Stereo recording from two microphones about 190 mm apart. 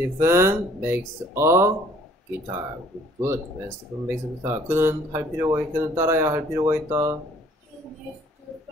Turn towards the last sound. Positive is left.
turn(degrees=-15)  # may be behind; listen again after turning